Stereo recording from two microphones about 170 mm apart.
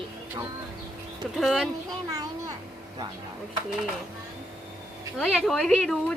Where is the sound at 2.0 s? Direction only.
20° right (ahead or behind).